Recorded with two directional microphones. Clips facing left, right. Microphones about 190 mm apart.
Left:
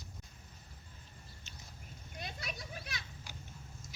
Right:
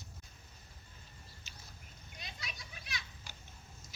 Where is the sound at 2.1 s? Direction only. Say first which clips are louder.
Left 6 dB; 50° left (ahead or behind).